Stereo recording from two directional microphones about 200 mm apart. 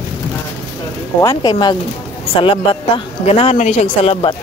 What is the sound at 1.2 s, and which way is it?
Speech, 20° left (ahead or behind).